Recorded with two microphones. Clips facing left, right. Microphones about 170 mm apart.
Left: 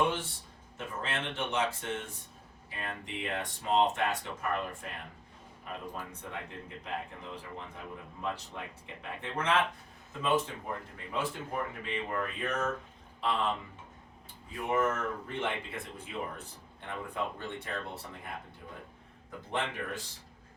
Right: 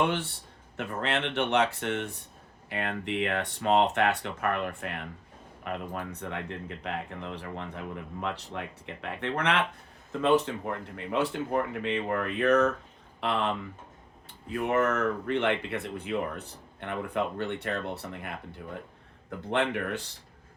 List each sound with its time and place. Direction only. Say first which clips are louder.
0.0 s speech: right 3 dB; 70° right (ahead or behind)
14.5 s speech: right 4 dB; 70° right (ahead or behind)
19.5 s speech: right 7 dB; 70° right (ahead or behind)